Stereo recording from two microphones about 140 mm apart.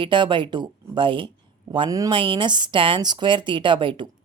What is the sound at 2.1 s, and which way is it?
Speech, 35° right (ahead or behind).